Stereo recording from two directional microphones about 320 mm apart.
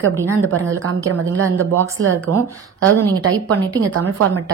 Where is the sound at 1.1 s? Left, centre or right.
Right.